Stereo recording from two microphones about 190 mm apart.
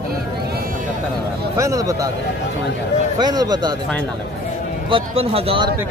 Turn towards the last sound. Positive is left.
turn(degrees=-30)  # may be behind; listen again after turning